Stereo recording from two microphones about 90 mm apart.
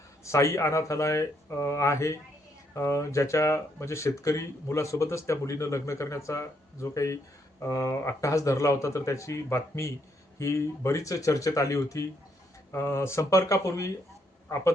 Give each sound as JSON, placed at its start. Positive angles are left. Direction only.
{"t": 0.3, "sound": "speech", "side_deg": 35}